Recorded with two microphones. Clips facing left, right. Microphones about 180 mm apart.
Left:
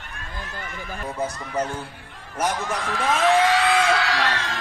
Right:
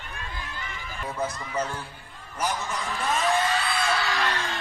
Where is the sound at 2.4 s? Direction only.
85° left.